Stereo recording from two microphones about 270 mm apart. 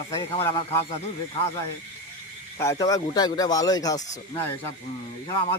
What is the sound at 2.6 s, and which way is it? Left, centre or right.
Speech, centre.